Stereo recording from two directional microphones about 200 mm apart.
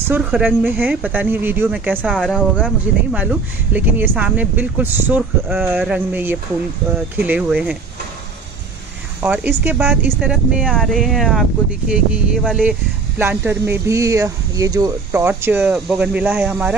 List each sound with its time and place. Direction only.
0.1 s speech: 5° right (ahead or behind)
2.1 s speech: 5° left (ahead or behind)
2.5 s speech: 5° right (ahead or behind)
9.2 s speech: 10° right (ahead or behind)